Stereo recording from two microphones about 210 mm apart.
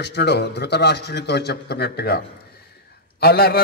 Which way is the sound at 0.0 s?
55° left (ahead or behind).